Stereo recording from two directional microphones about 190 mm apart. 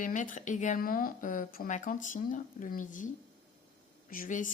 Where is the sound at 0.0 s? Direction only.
40° left (ahead or behind).